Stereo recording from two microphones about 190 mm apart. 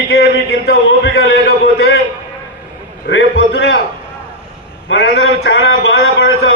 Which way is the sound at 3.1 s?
70° left (ahead or behind).